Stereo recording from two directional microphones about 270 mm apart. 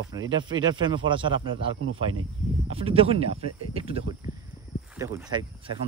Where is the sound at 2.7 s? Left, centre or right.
Right.